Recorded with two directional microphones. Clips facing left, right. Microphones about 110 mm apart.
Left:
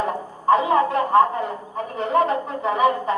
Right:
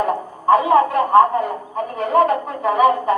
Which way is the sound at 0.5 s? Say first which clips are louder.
Right 4 dB; 25° left (ahead or behind).